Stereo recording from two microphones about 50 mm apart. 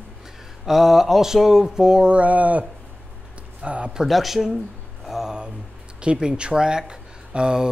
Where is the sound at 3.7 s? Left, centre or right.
Right.